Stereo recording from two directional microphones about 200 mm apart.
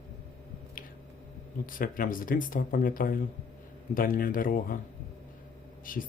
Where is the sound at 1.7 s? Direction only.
45° left (ahead or behind).